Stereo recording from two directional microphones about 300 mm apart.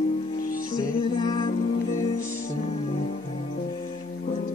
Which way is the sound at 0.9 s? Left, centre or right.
Centre.